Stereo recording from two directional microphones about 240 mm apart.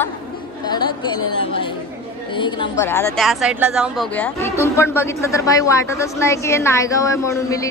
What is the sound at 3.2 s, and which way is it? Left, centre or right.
Speech, centre.